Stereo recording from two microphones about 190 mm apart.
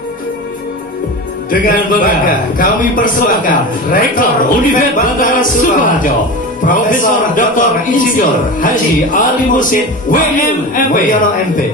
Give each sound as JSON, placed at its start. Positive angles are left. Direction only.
{"t": 1.5, "sound": "a man's voice", "side_deg": 45}